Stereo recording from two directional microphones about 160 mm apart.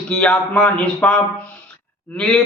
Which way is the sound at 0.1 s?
10° left (ahead or behind).